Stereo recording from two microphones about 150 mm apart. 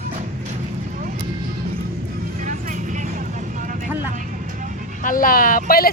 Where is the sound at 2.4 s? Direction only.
55° right (ahead or behind).